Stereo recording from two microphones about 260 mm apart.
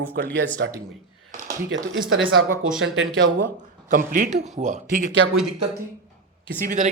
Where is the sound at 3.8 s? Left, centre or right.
Right.